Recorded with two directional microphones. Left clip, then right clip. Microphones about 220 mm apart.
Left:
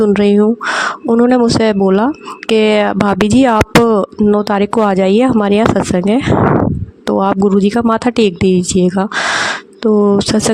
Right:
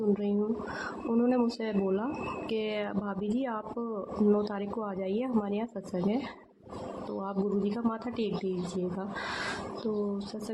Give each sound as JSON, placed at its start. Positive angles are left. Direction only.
{"t": 0.1, "sound": "speech", "side_deg": 50}